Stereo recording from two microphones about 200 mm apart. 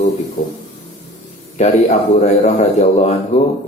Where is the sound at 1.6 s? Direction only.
35° left (ahead or behind).